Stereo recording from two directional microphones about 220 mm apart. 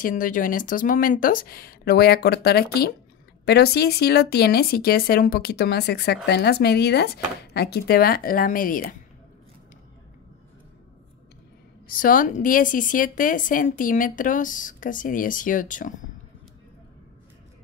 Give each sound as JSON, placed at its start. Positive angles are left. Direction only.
{"t": 0.0, "sound": "a woman's voice", "side_deg": 35}
{"t": 11.9, "sound": "a woman's voice", "side_deg": 40}